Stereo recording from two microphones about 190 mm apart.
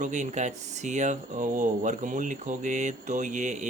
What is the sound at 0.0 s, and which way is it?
Speech, 40° right (ahead or behind).